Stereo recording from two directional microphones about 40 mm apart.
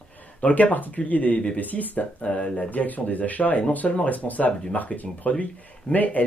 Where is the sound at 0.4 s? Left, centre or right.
Left.